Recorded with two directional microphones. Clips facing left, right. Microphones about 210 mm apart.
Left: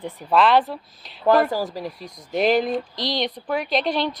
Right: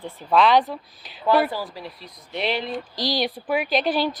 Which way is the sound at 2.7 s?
Centre (ahead or behind).